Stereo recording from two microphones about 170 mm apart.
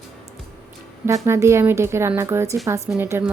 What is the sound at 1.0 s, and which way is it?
Speech, 15° right (ahead or behind).